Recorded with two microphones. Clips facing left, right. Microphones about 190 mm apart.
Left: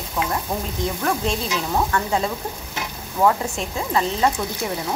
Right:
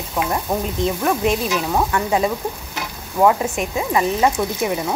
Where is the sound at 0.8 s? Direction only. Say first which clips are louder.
Right 4 dB; 15° right (ahead or behind).